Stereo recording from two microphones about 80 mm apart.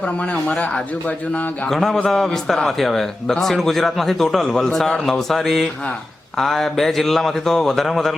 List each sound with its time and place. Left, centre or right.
0.4 s speech: centre
1.7 s a man's voice: centre